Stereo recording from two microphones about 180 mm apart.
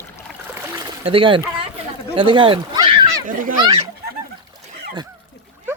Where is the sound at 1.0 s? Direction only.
30° right (ahead or behind).